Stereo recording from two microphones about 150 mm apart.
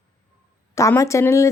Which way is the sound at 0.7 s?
20° left (ahead or behind).